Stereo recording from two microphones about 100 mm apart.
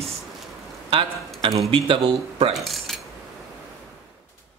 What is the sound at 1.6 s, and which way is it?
Speech, 60° right (ahead or behind).